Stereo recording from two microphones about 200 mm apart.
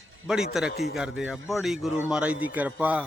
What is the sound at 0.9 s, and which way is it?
Speech, 5° right (ahead or behind).